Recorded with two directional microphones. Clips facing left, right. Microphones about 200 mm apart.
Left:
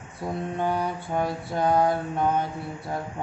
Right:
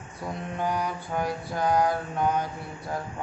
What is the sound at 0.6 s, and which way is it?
Mantra, 25° left (ahead or behind).